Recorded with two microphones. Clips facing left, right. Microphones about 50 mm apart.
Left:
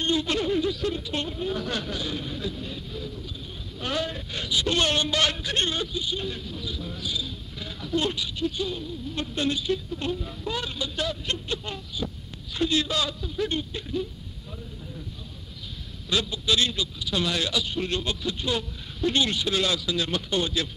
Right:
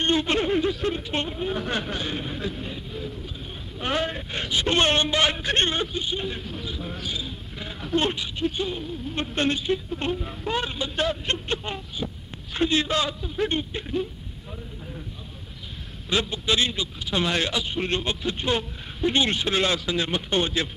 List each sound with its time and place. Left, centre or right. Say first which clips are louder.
0.0 s a man's voice: right 3 dB; right
16.1 s a man's voice: right 1 dB; right